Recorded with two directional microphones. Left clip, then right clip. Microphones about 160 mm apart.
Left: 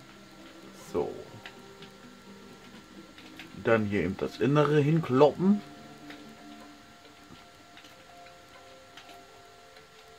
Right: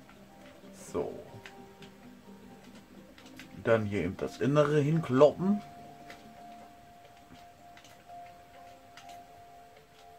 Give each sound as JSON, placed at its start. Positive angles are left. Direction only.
{"t": 0.9, "sound": "music", "side_deg": 25}
{"t": 3.6, "sound": "speech", "side_deg": 20}